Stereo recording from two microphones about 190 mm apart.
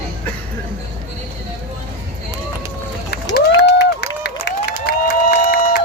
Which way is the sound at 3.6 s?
60° left (ahead or behind).